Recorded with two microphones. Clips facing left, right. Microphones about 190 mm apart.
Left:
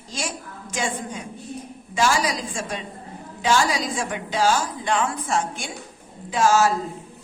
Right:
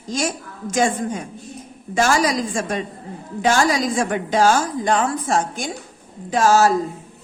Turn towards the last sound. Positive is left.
turn(degrees=-40)  # may be behind; listen again after turning